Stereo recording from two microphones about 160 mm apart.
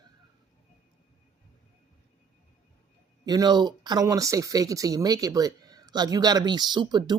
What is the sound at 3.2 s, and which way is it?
Speech, 25° right (ahead or behind).